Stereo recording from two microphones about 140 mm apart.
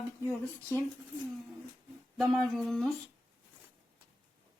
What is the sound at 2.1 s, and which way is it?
Humming, centre (ahead or behind).